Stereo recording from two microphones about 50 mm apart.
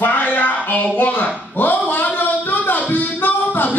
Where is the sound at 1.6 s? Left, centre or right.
Left.